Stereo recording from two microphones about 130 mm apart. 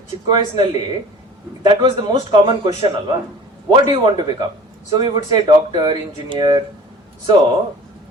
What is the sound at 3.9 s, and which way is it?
Speech, 35° right (ahead or behind).